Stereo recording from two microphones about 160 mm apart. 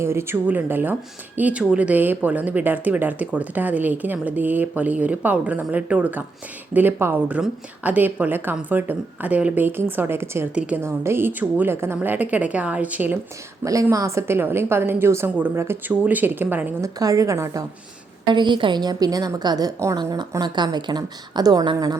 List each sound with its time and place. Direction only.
0.0 s speech: 15° right (ahead or behind)
13.7 s a woman's voice: 20° right (ahead or behind)
18.3 s a woman's voice: 30° right (ahead or behind)